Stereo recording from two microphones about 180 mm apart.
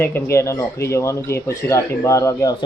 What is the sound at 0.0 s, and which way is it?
Speech, 15° left (ahead or behind).